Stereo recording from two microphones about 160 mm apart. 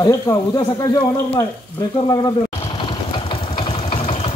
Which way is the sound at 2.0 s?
25° left (ahead or behind).